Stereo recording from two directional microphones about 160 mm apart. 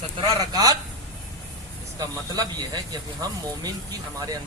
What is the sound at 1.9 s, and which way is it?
A woman's voice, 25° right (ahead or behind).